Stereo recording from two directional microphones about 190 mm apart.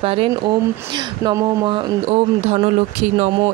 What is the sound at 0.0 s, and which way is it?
Speech, 30° right (ahead or behind).